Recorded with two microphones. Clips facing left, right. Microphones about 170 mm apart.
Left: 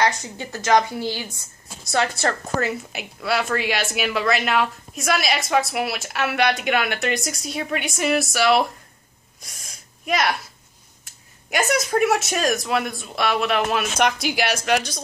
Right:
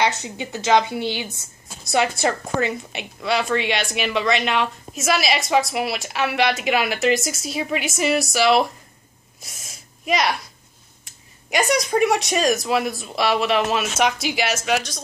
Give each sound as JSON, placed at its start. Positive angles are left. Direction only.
{"t": 0.0, "sound": "a woman's voice", "side_deg": -20}
{"t": 2.5, "sound": "a woman's voice", "side_deg": 5}
{"t": 9.4, "sound": "a sound", "side_deg": 0}
{"t": 11.1, "sound": "a woman's voice", "side_deg": 0}